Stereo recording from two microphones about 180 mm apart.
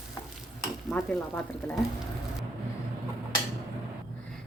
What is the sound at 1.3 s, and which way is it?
Speech, 10° left (ahead or behind).